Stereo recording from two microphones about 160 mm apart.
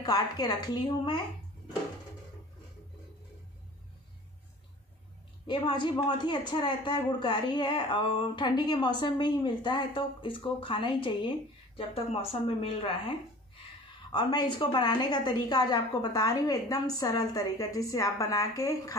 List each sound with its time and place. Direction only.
0.0 s a man's voice: 25° left (ahead or behind)
5.5 s a man's voice: 30° left (ahead or behind)
14.1 s a man's voice: 30° left (ahead or behind)